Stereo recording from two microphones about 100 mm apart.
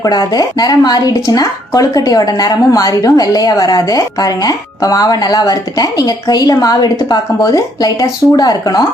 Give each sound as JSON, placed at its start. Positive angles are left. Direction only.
{"t": 0.0, "sound": "speech", "side_deg": 40}